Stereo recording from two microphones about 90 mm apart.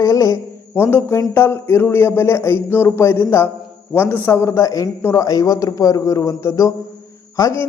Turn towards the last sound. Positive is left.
turn(degrees=35)  # may be behind; listen again after turning